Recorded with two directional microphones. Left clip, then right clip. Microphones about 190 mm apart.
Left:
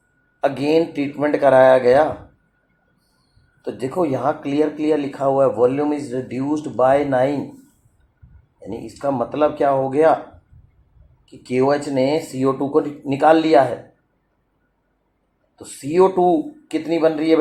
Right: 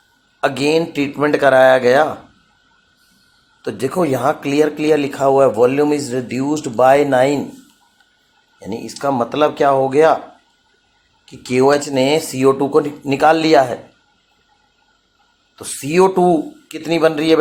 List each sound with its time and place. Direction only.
0.4 s speech: 30° right (ahead or behind)
3.6 s speech: 30° right (ahead or behind)
3.8 s speech: 45° right (ahead or behind)
8.5 s speech: 30° right (ahead or behind)
11.4 s speech: 30° right (ahead or behind)
15.5 s speech: 30° right (ahead or behind)